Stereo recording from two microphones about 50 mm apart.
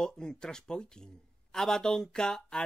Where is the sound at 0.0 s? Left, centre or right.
Centre.